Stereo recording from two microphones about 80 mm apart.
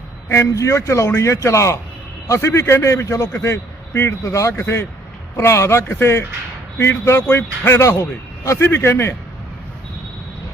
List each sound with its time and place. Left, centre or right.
0.3 s a man's voice: left